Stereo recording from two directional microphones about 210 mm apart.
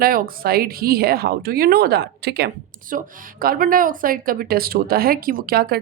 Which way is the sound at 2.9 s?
40° right (ahead or behind).